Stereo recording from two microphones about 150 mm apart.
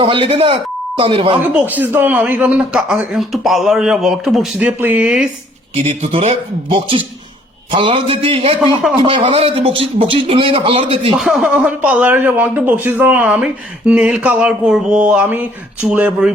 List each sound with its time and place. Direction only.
0.0 s speech: 35° right (ahead or behind)
1.5 s speech: 10° right (ahead or behind)
5.7 s speech: 40° right (ahead or behind)
11.2 s speech: 5° right (ahead or behind)